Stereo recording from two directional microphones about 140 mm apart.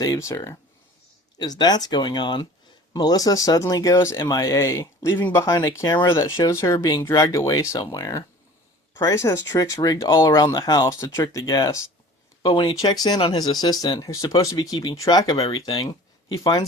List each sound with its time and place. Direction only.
0.0 s speech: 25° left (ahead or behind)
12.4 s speech: 35° left (ahead or behind)
13.1 s speech: 40° left (ahead or behind)
13.4 s speech: 30° left (ahead or behind)
15.4 s speech: 40° left (ahead or behind)